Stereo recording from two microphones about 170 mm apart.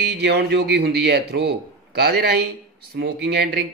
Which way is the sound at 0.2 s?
70° right (ahead or behind).